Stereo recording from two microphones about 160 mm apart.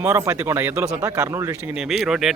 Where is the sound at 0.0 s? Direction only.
15° right (ahead or behind).